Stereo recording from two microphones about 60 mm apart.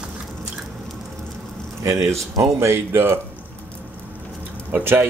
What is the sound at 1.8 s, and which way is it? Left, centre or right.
Speech, right.